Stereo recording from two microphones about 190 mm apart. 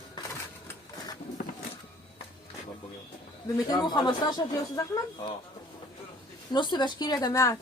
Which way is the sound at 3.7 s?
20° left (ahead or behind).